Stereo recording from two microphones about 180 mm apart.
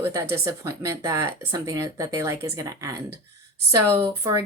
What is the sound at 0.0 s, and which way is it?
A woman's voice, 15° right (ahead or behind).